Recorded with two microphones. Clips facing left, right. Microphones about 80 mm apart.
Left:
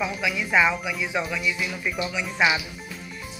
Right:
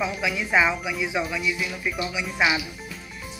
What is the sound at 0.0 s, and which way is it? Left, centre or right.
Speech, centre.